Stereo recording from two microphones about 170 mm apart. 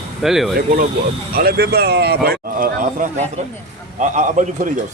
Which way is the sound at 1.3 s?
65° right (ahead or behind).